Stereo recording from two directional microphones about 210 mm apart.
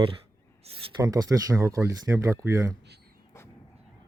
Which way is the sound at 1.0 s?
15° right (ahead or behind).